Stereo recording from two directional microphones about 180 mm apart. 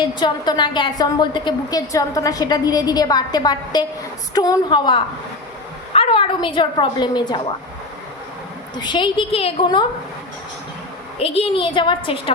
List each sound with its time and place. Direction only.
0.1 s a woman's voice: 25° left (ahead or behind)
8.8 s a woman's voice: 25° left (ahead or behind)
11.2 s a woman's voice: 30° left (ahead or behind)